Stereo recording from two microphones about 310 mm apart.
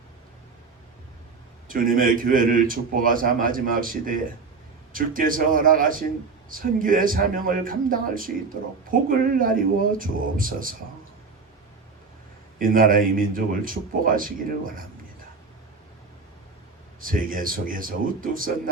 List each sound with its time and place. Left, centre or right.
1.6 s a man's voice: right
12.5 s a man's voice: right
17.0 s a man's voice: right